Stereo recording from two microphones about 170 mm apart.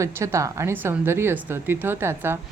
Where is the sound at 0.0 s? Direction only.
15° right (ahead or behind).